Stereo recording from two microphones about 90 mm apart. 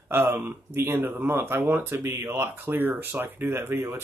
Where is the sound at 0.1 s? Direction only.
25° right (ahead or behind).